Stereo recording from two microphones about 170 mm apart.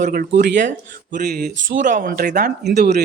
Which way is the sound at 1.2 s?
70° right (ahead or behind).